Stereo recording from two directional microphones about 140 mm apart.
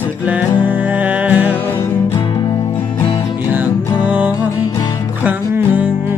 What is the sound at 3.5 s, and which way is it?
Music, 10° right (ahead or behind).